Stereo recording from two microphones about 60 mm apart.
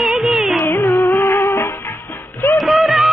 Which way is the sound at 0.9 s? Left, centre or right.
Left.